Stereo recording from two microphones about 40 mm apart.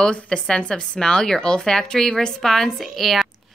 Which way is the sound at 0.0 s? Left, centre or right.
Left.